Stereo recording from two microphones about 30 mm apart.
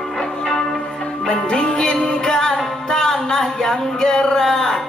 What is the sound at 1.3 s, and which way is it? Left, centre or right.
Music, left.